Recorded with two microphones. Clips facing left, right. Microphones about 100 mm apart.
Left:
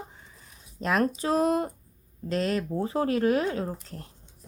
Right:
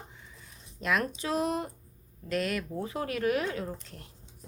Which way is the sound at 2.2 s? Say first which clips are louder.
Left 4 dB; 30° left (ahead or behind).